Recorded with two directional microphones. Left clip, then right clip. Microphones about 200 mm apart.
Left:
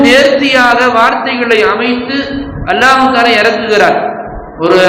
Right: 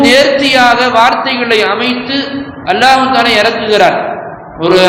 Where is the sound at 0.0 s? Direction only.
15° right (ahead or behind).